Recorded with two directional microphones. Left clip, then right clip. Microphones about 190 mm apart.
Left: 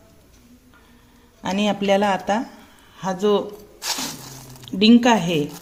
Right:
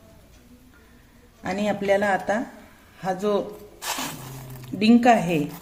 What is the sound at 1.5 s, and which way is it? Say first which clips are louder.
Speech: left 3 dB; 35° left (ahead or behind).